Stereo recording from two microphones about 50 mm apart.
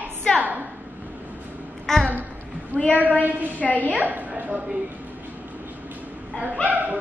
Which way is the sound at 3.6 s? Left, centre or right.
Left.